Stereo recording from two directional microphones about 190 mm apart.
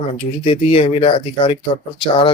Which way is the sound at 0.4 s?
30° left (ahead or behind).